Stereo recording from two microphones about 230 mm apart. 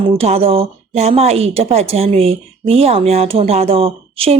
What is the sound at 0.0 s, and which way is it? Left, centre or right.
Speech, right.